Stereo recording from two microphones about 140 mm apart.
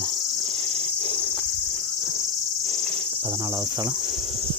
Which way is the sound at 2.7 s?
45° right (ahead or behind).